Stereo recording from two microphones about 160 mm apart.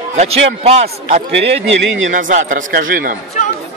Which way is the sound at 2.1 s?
50° right (ahead or behind).